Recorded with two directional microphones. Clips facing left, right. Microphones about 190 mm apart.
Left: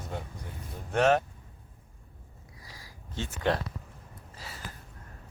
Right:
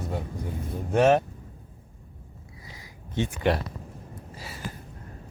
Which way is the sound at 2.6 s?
20° right (ahead or behind).